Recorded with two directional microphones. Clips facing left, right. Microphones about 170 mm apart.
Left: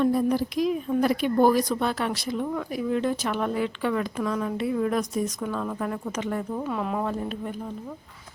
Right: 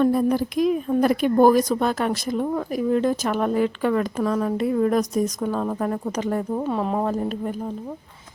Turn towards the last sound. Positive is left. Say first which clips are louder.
# right 5 dB
turn(degrees=-40)  # may be behind; listen again after turning